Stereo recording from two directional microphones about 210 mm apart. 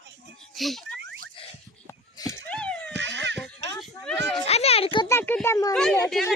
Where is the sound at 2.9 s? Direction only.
55° right (ahead or behind).